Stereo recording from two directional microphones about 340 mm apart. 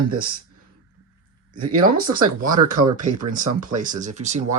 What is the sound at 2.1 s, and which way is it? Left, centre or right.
Speech, right.